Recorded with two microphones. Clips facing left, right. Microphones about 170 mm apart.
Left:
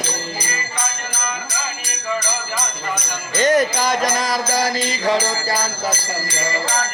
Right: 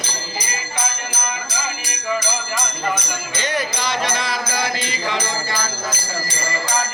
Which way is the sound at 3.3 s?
45° left (ahead or behind).